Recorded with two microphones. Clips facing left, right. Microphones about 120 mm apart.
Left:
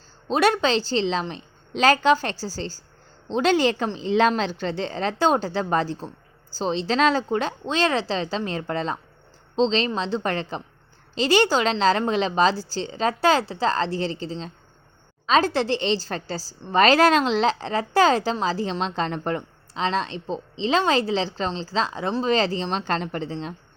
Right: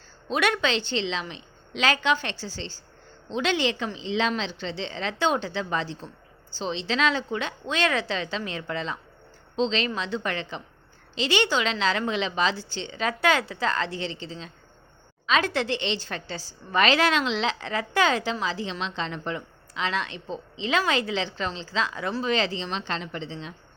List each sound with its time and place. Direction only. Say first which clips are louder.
0.3 s a woman's voice: left 5 dB; 35° left (ahead or behind)
19.4 s a woman's voice: left 4 dB; 35° left (ahead or behind)